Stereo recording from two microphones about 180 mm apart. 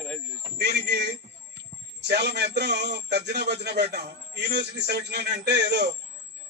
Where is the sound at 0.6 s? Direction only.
70° right (ahead or behind).